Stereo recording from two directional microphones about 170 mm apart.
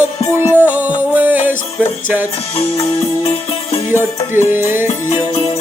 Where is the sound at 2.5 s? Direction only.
40° left (ahead or behind).